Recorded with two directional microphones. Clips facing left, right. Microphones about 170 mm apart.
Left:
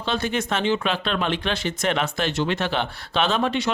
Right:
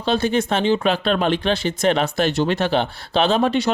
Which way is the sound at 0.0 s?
35° right (ahead or behind).